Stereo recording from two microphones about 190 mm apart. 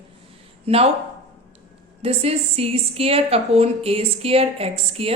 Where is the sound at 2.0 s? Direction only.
30° right (ahead or behind).